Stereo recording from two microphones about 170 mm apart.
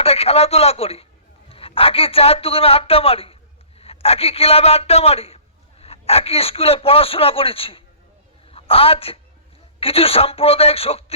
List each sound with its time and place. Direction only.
0.0 s a man's voice: 35° left (ahead or behind)